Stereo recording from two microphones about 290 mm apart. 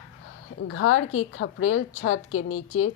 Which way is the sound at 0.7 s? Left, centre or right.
Left.